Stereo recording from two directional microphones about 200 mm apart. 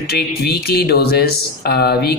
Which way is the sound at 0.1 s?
50° left (ahead or behind).